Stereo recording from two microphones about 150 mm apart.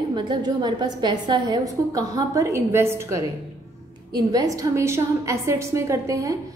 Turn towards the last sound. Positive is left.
turn(degrees=-20)  # may be behind; listen again after turning